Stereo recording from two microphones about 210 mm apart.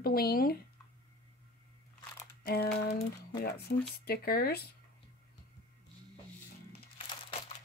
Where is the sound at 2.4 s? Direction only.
45° left (ahead or behind).